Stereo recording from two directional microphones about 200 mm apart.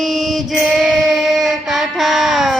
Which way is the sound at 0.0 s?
Centre (ahead or behind).